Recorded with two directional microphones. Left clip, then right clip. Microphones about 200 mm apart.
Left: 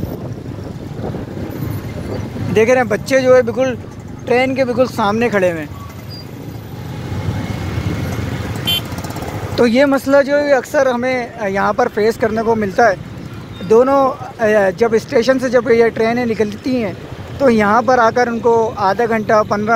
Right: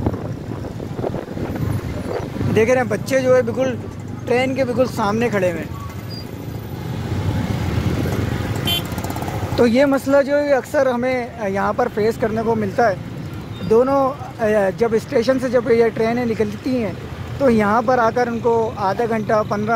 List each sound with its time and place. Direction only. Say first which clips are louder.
2.5 s speech: left 4 dB; 5° left (ahead or behind)
8.7 s vehicle: left 4 dB; 50° right (ahead or behind)
9.6 s speech: left 3 dB; centre (ahead or behind)